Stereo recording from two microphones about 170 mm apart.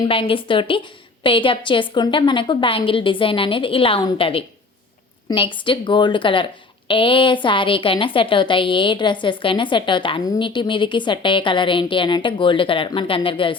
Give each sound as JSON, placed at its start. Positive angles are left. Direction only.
{"t": 0.1, "sound": "a woman's voice", "side_deg": 30}